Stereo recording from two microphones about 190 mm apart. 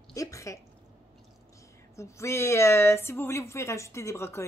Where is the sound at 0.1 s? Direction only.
15° left (ahead or behind).